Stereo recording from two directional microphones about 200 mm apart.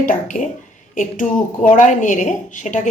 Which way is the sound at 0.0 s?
40° left (ahead or behind).